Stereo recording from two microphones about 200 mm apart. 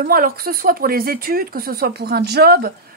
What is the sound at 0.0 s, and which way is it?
Speech, 50° right (ahead or behind).